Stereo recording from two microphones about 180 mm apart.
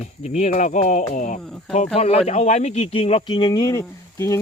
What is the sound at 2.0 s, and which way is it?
Speech, 35° left (ahead or behind).